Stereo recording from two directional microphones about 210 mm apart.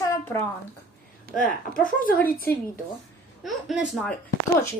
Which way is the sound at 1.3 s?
40° left (ahead or behind).